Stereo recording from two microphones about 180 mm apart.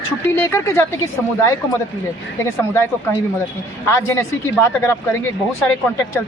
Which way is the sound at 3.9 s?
15° left (ahead or behind).